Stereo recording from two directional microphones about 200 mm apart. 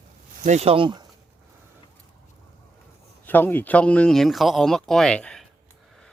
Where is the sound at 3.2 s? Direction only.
10° left (ahead or behind).